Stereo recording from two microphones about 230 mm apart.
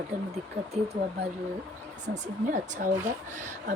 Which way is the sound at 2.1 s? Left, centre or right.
Right.